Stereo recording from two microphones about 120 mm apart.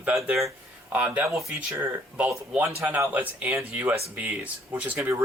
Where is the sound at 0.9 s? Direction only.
15° right (ahead or behind).